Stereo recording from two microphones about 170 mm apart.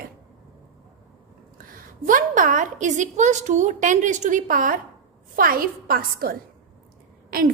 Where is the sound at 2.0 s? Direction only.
50° right (ahead or behind).